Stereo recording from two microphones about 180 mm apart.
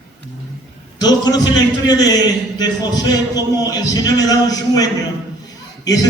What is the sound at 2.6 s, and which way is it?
Speech, 20° left (ahead or behind).